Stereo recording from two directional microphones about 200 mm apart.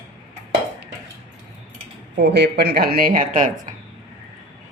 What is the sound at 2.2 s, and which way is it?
Speech, 60° right (ahead or behind).